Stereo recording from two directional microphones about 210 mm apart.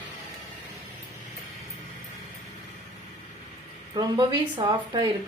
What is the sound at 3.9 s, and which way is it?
A woman's voice, 20° right (ahead or behind).